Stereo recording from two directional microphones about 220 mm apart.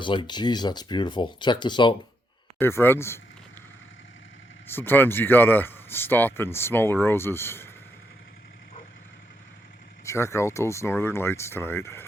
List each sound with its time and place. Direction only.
0.0 s speech: 20° left (ahead or behind)
4.7 s speech: 10° left (ahead or behind)
10.1 s speech: 15° left (ahead or behind)